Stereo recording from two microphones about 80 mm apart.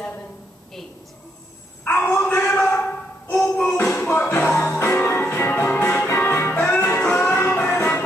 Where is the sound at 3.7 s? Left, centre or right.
Left.